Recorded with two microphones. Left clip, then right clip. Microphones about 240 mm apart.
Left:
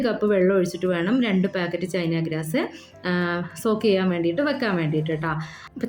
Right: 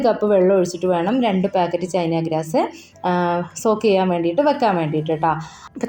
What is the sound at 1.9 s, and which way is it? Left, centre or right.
Speech, left.